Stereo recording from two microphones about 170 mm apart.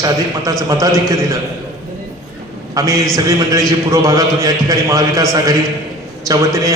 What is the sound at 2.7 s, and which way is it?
A man's voice, 20° right (ahead or behind).